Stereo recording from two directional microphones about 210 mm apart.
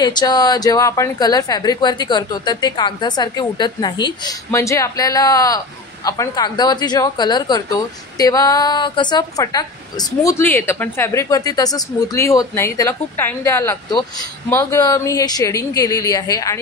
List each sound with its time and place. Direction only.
0.0 s a woman's voice: 20° left (ahead or behind)